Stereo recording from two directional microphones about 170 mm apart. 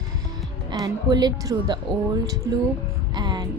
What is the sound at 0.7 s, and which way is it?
Speech, 25° right (ahead or behind).